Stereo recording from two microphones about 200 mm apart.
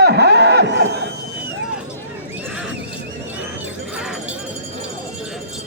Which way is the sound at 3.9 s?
5° right (ahead or behind).